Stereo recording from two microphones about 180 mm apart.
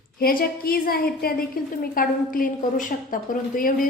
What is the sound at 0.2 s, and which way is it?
A woman's voice, 55° left (ahead or behind).